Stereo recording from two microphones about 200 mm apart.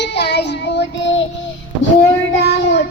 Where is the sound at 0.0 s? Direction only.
55° left (ahead or behind).